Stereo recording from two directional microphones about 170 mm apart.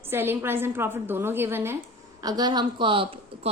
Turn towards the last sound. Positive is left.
turn(degrees=-30)  # may be behind; listen again after turning